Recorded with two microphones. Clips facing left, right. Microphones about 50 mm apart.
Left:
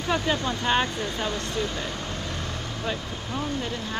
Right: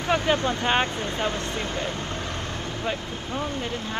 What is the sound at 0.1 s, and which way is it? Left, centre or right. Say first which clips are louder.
Speech: right 3 dB; right.